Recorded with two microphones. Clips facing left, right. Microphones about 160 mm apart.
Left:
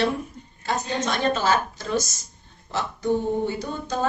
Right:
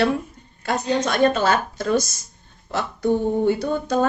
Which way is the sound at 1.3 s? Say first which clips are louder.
Right 2 dB; 55° right (ahead or behind).